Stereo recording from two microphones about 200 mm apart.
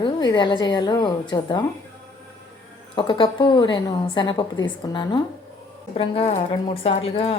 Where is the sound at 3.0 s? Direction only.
25° left (ahead or behind).